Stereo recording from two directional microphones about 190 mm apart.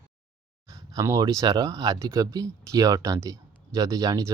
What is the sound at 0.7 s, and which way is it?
Speech, 15° right (ahead or behind).